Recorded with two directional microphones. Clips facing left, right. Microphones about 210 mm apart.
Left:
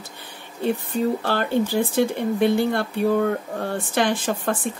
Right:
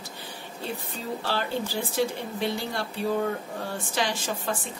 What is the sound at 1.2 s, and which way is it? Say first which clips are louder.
Speech: left 7 dB; 55° left (ahead or behind).